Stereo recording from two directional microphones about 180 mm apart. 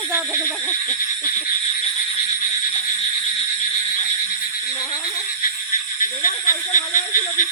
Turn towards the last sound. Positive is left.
turn(degrees=45)  # may be behind; listen again after turning